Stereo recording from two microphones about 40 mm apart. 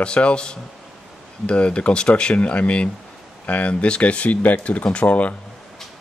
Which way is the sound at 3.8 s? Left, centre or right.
Left.